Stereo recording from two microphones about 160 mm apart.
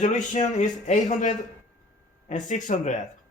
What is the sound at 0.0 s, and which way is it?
Speech, 50° left (ahead or behind).